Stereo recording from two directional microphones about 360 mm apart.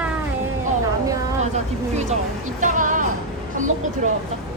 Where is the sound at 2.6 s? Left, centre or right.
Right.